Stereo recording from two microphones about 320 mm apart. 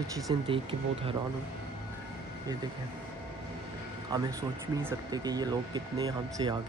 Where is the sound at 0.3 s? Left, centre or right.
Centre.